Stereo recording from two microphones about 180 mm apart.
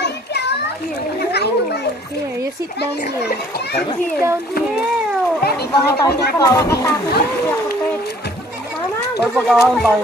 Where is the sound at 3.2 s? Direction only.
65° left (ahead or behind).